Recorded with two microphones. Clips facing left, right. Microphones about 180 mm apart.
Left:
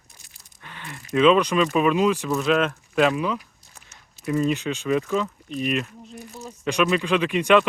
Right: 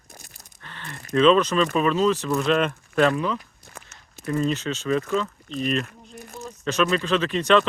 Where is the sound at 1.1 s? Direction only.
10° left (ahead or behind).